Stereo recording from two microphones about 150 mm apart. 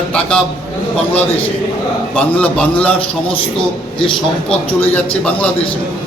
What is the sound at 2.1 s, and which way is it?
Speech, 10° left (ahead or behind).